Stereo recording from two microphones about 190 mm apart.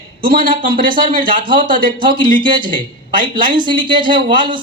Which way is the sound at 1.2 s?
25° right (ahead or behind).